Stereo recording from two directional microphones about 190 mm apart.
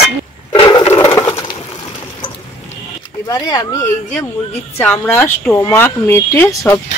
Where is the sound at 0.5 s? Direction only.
25° left (ahead or behind).